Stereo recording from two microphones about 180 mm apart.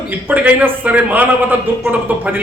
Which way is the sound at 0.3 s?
10° right (ahead or behind).